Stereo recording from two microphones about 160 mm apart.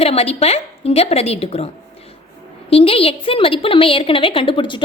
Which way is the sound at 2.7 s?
35° left (ahead or behind).